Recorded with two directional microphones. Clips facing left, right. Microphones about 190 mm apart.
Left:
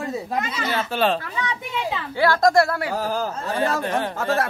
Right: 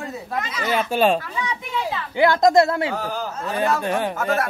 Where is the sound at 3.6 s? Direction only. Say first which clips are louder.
Right 2 dB; 15° right (ahead or behind).